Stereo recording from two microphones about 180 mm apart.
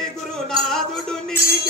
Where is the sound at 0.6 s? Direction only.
5° left (ahead or behind).